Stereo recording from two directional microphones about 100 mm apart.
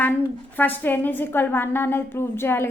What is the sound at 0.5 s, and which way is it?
A woman's voice, 20° left (ahead or behind).